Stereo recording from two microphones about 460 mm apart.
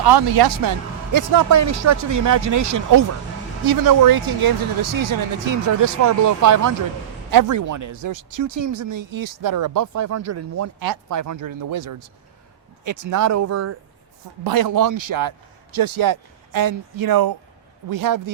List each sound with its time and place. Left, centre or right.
0.0 s speech: right
1.1 s speech: right
14.4 s speech: right